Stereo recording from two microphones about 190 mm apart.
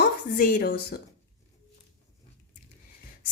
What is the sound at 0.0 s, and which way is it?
Speech, 45° left (ahead or behind).